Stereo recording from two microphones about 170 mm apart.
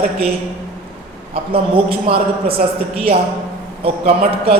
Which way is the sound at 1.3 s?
30° right (ahead or behind).